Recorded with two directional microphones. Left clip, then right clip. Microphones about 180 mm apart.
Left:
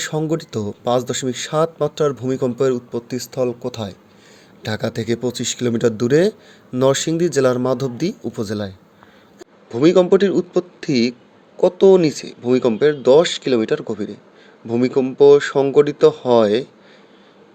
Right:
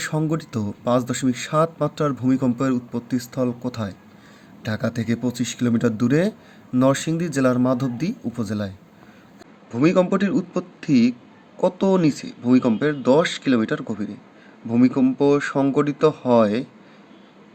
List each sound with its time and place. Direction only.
0.0 s a man's voice: 25° left (ahead or behind)